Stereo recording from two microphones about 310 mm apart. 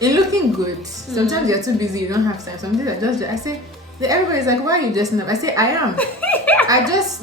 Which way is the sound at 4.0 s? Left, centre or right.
Centre.